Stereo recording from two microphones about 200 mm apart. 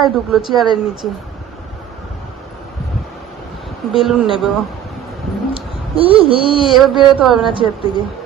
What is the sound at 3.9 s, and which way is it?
Speech, centre (ahead or behind).